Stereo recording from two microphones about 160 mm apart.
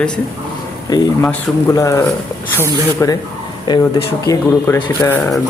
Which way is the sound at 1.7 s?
20° left (ahead or behind).